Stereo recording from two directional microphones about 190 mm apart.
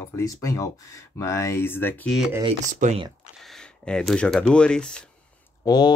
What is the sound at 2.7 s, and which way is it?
Speech, 40° right (ahead or behind).